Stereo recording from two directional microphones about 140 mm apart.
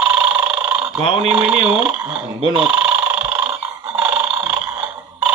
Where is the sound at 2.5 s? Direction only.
5° right (ahead or behind).